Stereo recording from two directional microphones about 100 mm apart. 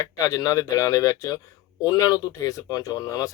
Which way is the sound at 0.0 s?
35° left (ahead or behind).